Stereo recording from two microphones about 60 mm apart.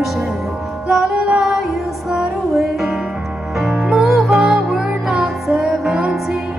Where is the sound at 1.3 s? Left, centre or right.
Centre.